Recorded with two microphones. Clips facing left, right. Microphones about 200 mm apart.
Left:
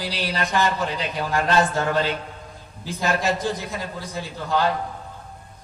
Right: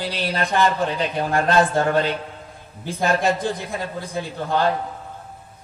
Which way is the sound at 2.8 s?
55° right (ahead or behind).